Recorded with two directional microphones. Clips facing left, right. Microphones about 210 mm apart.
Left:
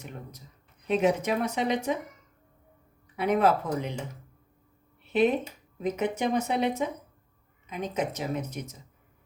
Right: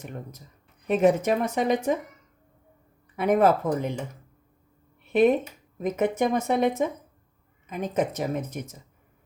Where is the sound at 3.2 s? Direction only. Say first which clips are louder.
Right 3 dB; 50° right (ahead or behind).